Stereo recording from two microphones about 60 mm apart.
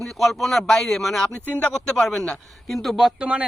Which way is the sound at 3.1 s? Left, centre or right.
Right.